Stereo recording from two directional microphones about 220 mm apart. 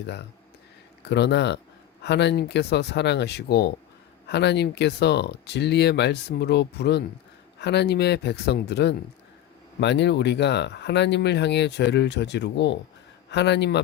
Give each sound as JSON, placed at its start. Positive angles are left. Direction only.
{"t": 1.0, "sound": "speech", "side_deg": 50}